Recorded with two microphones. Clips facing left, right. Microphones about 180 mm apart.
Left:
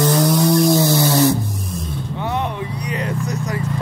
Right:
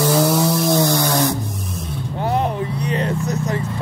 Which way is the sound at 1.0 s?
55° right (ahead or behind).